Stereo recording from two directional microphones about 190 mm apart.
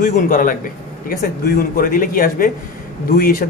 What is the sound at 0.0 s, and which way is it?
A man's voice, 45° left (ahead or behind).